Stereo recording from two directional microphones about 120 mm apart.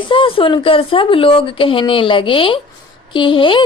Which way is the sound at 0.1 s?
50° left (ahead or behind).